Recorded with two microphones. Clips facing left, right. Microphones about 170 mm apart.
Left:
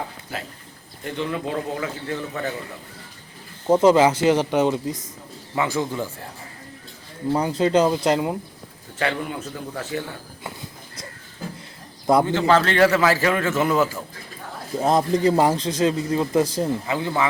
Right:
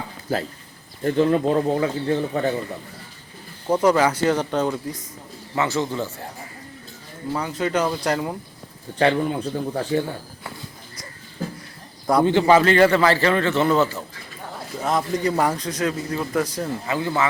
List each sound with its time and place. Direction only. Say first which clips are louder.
1.0 s speech: right 9 dB; 40° right (ahead or behind)
3.7 s a man's voice: left 3 dB; 25° left (ahead or behind)
7.3 s a man's voice: left 4 dB; 30° left (ahead or behind)
9.0 s speech: right 6 dB; 35° right (ahead or behind)
12.2 s a man's voice: right 3 dB; 15° right (ahead or behind); by 14.0 s 10° left (ahead or behind)
14.8 s a man's voice: left 4 dB; 30° left (ahead or behind)